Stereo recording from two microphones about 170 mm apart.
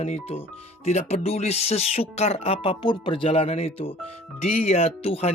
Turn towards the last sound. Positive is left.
turn(degrees=35)  # may be behind; listen again after turning